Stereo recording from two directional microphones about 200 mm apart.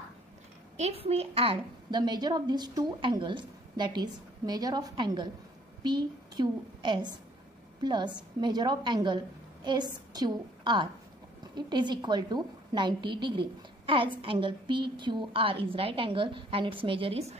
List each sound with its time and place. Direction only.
0.7 s a woman's voice: 30° right (ahead or behind)